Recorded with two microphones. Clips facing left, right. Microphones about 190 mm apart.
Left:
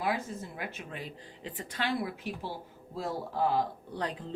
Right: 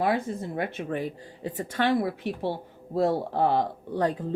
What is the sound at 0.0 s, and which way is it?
A woman's voice, 60° right (ahead or behind).